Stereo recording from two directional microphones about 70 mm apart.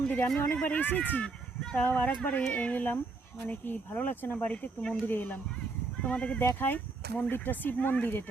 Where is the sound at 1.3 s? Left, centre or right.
Centre.